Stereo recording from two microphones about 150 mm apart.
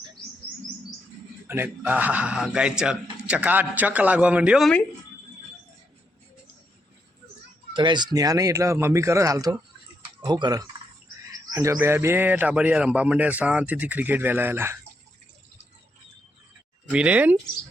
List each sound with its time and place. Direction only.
0.2 s bird: 5° left (ahead or behind)
1.5 s a man's voice: 15° right (ahead or behind)
7.7 s a man's voice: 30° right (ahead or behind); by 14.8 s 15° right (ahead or behind)
16.9 s a man's voice: 10° right (ahead or behind)